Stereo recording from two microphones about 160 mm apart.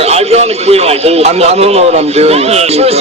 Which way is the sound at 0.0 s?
40° right (ahead or behind).